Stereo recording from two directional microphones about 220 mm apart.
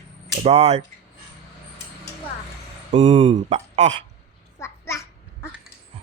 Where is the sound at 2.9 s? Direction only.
30° right (ahead or behind).